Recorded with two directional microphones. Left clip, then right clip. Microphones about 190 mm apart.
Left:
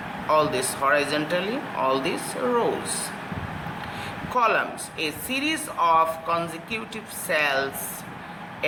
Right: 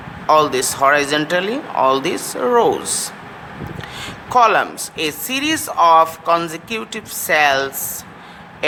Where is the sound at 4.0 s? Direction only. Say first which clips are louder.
Right 10 dB; 55° right (ahead or behind).